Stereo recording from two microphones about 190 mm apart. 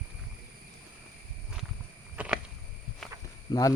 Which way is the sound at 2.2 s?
10° right (ahead or behind).